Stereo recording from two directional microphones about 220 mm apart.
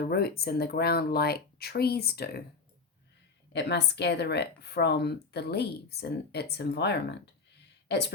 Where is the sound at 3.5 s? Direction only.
50° left (ahead or behind).